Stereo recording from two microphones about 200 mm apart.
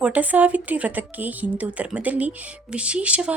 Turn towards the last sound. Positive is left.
turn(degrees=-5)  # may be behind; listen again after turning